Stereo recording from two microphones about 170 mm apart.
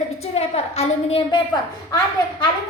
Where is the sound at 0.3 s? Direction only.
35° left (ahead or behind).